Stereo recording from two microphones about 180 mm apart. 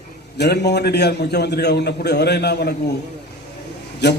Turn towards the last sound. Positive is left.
turn(degrees=65)  # may be behind; listen again after turning